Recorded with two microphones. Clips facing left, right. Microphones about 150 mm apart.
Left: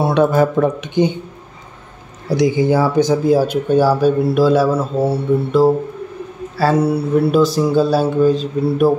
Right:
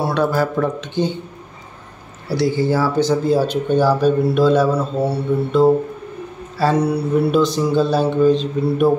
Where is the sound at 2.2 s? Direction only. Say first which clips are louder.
Left 3 dB; 15° left (ahead or behind).